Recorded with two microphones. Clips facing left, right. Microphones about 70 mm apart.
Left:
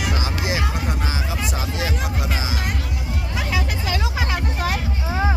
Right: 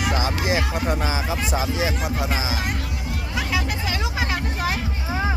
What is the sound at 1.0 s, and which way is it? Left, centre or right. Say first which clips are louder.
Speech: right 2 dB; right.